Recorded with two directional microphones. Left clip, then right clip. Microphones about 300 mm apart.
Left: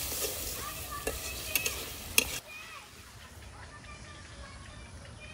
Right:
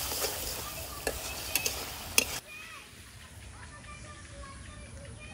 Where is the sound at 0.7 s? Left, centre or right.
Centre.